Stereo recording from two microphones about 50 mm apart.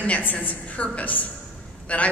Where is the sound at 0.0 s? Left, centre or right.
Left.